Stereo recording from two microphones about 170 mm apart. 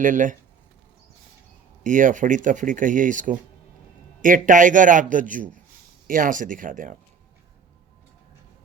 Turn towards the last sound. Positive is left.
turn(degrees=-50)  # may be behind; listen again after turning